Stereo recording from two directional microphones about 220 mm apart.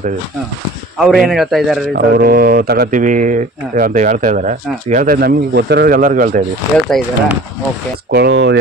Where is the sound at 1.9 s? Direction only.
45° right (ahead or behind).